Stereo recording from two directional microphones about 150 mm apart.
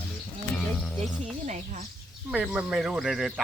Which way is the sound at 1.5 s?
55° right (ahead or behind).